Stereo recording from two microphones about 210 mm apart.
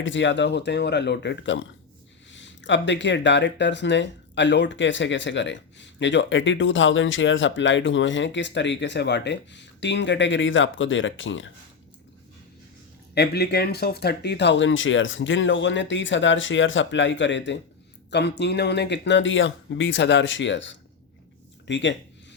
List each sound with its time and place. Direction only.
0.0 s speech: 60° left (ahead or behind)
13.1 s speech: 50° left (ahead or behind)